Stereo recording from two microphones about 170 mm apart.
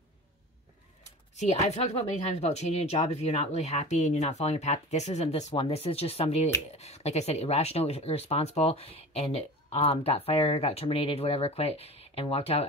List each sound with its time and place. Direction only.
1.3 s speech: 40° left (ahead or behind)